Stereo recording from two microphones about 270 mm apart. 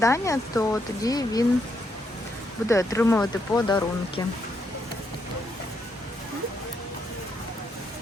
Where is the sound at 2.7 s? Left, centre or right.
Centre.